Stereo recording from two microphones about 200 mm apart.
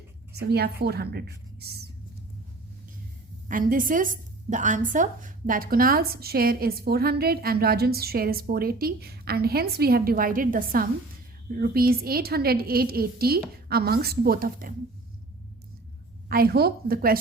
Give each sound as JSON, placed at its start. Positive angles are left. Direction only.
{"t": 0.3, "sound": "a woman's voice", "side_deg": -55}
{"t": 3.5, "sound": "a woman's voice", "side_deg": -40}
{"t": 16.3, "sound": "a woman's voice", "side_deg": -50}